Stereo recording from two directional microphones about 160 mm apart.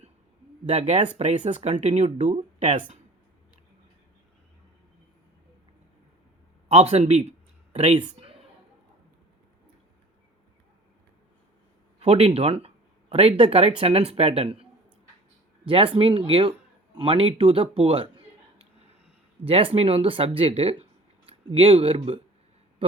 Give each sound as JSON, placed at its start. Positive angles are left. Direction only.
{"t": 0.6, "sound": "speech", "side_deg": -45}
{"t": 2.6, "sound": "speech", "side_deg": -30}
{"t": 6.7, "sound": "speech", "side_deg": -40}
{"t": 11.9, "sound": "speech", "side_deg": -40}
{"t": 15.6, "sound": "speech", "side_deg": -35}
{"t": 19.5, "sound": "speech", "side_deg": -35}